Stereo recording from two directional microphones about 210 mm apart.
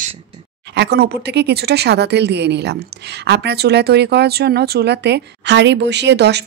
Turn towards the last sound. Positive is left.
turn(degrees=-55)  # may be behind; listen again after turning